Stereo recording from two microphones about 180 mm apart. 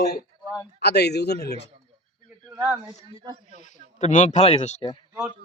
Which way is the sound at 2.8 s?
30° right (ahead or behind).